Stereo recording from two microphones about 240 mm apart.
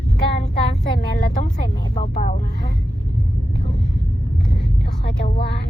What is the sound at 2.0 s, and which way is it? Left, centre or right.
Speech, left.